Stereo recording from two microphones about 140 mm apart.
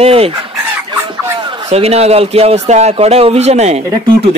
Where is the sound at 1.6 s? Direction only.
45° right (ahead or behind).